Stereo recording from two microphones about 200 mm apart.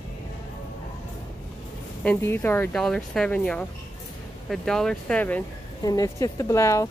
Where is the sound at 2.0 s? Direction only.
10° left (ahead or behind).